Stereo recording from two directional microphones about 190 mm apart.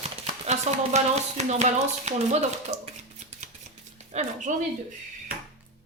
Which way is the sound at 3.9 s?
40° right (ahead or behind).